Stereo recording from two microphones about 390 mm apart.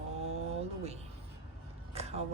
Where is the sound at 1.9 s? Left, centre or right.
Centre.